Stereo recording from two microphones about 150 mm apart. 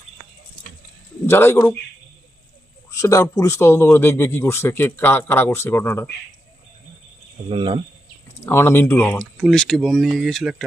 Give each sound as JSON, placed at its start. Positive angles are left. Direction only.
{"t": 1.3, "sound": "a man's voice", "side_deg": 15}
{"t": 2.9, "sound": "a man's voice", "side_deg": 20}
{"t": 7.5, "sound": "speech", "side_deg": -35}
{"t": 8.4, "sound": "speech", "side_deg": 15}